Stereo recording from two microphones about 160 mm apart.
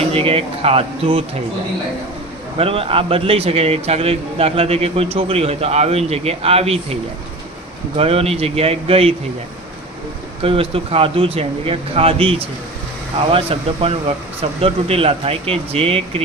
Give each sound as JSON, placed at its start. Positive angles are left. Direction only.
{"t": 0.1, "sound": "a man's voice", "side_deg": -35}
{"t": 2.6, "sound": "a man's voice", "side_deg": -35}
{"t": 7.9, "sound": "a man's voice", "side_deg": -40}
{"t": 10.4, "sound": "a man's voice", "side_deg": -35}